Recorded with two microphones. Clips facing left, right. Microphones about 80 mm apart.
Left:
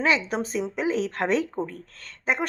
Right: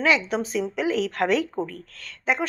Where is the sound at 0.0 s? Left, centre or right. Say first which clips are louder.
Right 2 dB; left.